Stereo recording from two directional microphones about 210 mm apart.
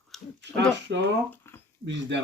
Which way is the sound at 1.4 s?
10° left (ahead or behind).